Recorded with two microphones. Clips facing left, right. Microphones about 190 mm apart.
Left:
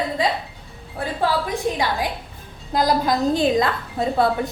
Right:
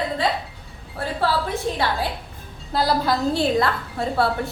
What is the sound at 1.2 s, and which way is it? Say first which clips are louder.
A woman's voice: left 1 dB; 15° left (ahead or behind).